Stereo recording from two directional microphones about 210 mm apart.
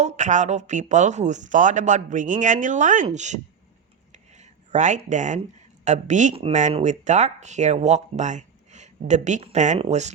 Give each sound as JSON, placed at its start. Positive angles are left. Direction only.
{"t": 0.0, "sound": "speech", "side_deg": -35}
{"t": 4.1, "sound": "a sound", "side_deg": -35}
{"t": 5.8, "sound": "speech", "side_deg": -35}